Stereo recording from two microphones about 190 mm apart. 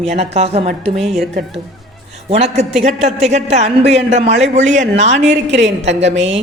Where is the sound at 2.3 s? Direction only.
35° right (ahead or behind).